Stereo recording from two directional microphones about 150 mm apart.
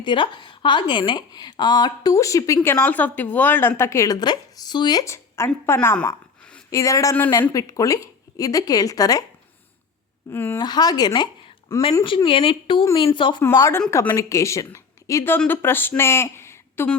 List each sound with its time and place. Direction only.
0.0 s speech: 30° left (ahead or behind)
2.6 s a woman's voice: 10° left (ahead or behind)
6.7 s speech: 20° left (ahead or behind)
10.3 s a woman's voice: 15° left (ahead or behind)
10.6 s a woman's voice: 25° left (ahead or behind)
13.4 s speech: 20° left (ahead or behind)